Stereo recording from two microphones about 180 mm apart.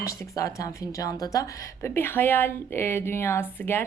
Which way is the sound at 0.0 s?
15° left (ahead or behind).